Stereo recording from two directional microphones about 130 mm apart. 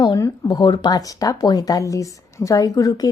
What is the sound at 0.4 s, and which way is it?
Speech, 35° left (ahead or behind).